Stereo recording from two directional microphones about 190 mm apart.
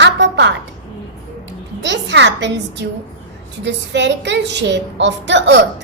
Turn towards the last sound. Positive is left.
turn(degrees=-65)  # may be behind; listen again after turning